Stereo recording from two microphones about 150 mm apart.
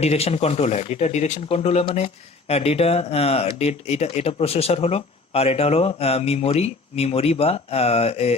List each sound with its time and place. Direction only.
0.0 s speech: 45° left (ahead or behind)